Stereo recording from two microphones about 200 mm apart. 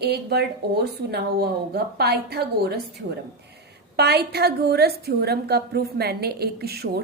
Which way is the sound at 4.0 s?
55° right (ahead or behind).